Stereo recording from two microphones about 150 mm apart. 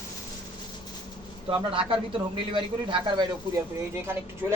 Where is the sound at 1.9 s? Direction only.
35° right (ahead or behind).